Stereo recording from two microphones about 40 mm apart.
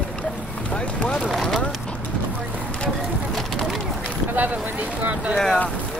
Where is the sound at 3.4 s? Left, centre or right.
Centre.